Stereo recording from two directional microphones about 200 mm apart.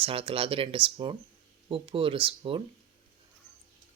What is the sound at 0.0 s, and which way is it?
Speech, 30° right (ahead or behind).